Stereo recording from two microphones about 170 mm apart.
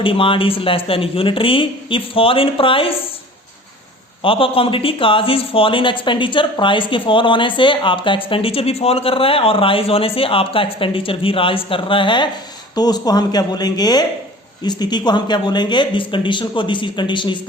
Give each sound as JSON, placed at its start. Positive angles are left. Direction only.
{"t": 0.0, "sound": "speech", "side_deg": 30}
{"t": 4.2, "sound": "speech", "side_deg": 30}